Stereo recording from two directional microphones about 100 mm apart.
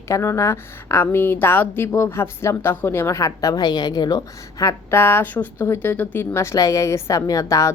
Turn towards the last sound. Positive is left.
turn(degrees=35)  # may be behind; listen again after turning